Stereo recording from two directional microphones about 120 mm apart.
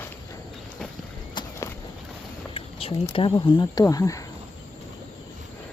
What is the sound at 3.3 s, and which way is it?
Speech, 35° left (ahead or behind).